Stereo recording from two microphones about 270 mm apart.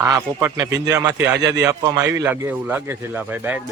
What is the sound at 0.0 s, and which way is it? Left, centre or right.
A man's voice, centre.